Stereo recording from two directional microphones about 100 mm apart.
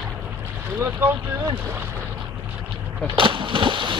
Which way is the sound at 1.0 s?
20° right (ahead or behind).